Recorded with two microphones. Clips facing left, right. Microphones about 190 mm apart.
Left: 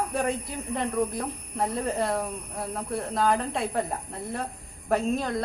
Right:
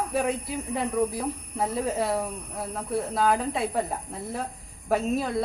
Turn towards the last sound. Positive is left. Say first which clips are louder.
# right 1 dB
turn(degrees=-5)  # may be behind; listen again after turning